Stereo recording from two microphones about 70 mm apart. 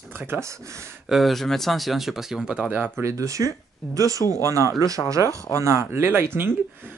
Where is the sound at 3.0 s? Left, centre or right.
Right.